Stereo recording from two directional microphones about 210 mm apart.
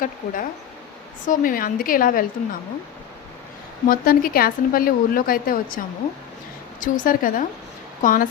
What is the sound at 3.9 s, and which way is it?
A woman's voice, 45° left (ahead or behind).